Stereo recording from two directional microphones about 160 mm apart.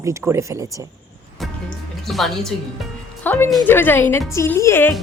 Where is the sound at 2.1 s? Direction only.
Centre (ahead or behind).